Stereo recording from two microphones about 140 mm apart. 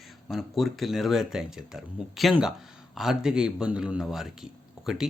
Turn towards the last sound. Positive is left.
turn(degrees=-5)  # may be behind; listen again after turning